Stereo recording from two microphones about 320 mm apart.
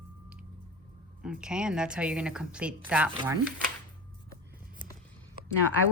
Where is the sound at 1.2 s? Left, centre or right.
Centre.